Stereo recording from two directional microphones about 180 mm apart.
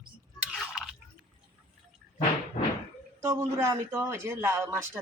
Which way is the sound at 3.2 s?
15° right (ahead or behind).